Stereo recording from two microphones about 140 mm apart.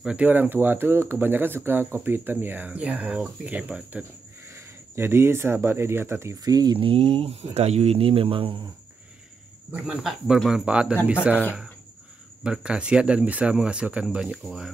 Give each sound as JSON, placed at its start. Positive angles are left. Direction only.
{"t": 0.0, "sound": "speech", "side_deg": -10}
{"t": 9.7, "sound": "speech", "side_deg": -5}
{"t": 12.4, "sound": "speech", "side_deg": -5}